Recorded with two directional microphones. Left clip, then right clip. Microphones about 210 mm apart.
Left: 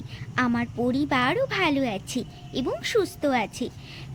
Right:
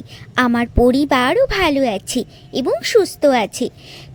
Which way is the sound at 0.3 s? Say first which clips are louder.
Right 10 dB; 40° right (ahead or behind).